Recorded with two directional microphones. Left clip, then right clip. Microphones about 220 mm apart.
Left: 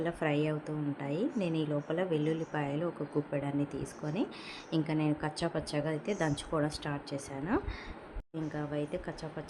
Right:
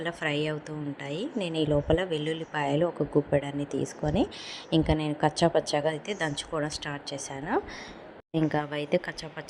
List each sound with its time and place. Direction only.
0.0 s a woman's voice: 20° right (ahead or behind)